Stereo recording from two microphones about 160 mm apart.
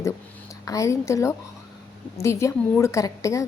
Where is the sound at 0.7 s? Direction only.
20° left (ahead or behind).